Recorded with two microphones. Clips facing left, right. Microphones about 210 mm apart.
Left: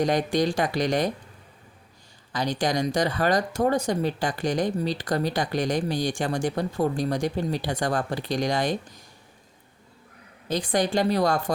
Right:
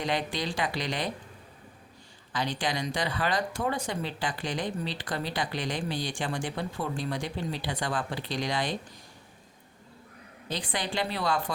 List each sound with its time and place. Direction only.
0.0 s speech: 45° left (ahead or behind)
2.3 s speech: 40° left (ahead or behind)
10.5 s speech: 45° left (ahead or behind)